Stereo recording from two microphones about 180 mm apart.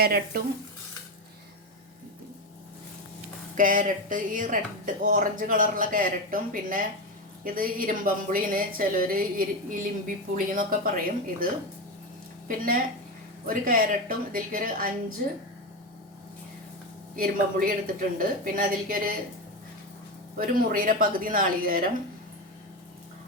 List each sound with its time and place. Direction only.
0.0 s speech: 60° right (ahead or behind)
3.6 s a woman's voice: 50° right (ahead or behind)
12.5 s a woman's voice: 50° right (ahead or behind)
17.2 s a woman's voice: 50° right (ahead or behind)
20.4 s a woman's voice: 50° right (ahead or behind)